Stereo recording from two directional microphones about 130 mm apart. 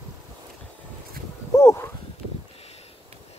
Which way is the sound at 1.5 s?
20° left (ahead or behind).